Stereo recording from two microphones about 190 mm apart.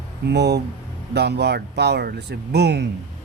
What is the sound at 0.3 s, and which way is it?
Speech, 60° right (ahead or behind).